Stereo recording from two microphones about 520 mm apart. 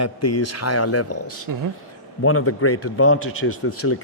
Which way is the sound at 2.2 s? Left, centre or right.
Left.